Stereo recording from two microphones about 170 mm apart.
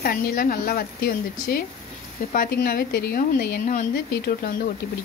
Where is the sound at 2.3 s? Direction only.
60° left (ahead or behind).